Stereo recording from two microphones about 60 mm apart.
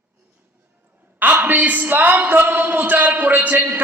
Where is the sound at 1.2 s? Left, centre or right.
Right.